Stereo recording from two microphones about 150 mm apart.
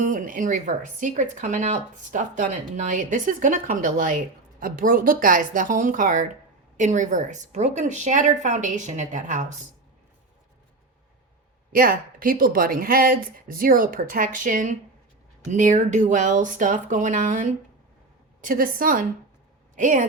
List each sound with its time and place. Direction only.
0.0 s speech: 60° right (ahead or behind)
11.7 s speech: 70° right (ahead or behind)